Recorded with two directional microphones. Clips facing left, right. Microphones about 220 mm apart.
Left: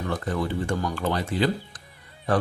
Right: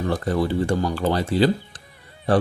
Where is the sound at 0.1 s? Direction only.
35° right (ahead or behind).